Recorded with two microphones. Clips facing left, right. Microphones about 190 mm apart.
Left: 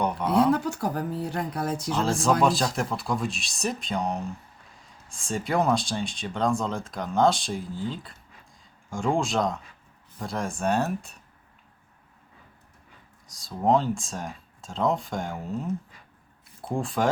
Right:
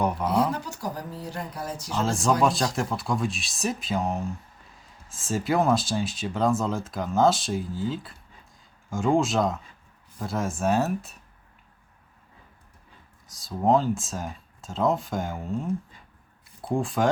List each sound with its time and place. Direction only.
0.0 s a sound: 5° right (ahead or behind)
0.5 s speech: 55° left (ahead or behind)
1.9 s speech: centre (ahead or behind)
13.2 s speech: centre (ahead or behind)